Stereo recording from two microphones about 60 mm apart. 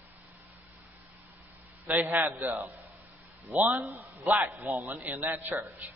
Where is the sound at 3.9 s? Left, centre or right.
Right.